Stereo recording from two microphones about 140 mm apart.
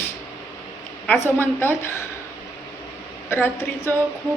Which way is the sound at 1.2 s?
15° left (ahead or behind).